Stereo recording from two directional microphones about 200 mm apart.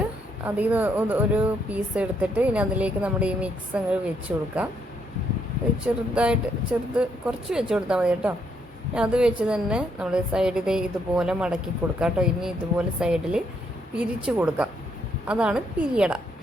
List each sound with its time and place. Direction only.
0.4 s a woman's voice: 10° right (ahead or behind)
6.1 s a woman's voice: 5° right (ahead or behind)